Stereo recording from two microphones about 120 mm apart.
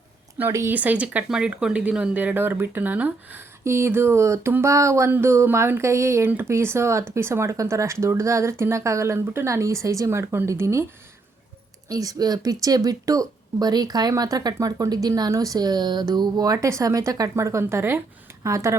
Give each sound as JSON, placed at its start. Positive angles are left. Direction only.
{"t": 0.3, "sound": "speech", "side_deg": -20}
{"t": 11.9, "sound": "speech", "side_deg": -30}